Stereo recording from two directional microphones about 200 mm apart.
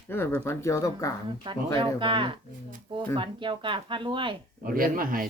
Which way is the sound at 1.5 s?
25° right (ahead or behind).